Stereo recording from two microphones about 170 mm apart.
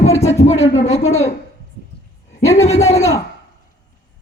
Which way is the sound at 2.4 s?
15° left (ahead or behind).